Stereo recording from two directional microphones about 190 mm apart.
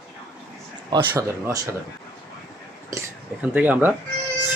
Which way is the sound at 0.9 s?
20° right (ahead or behind).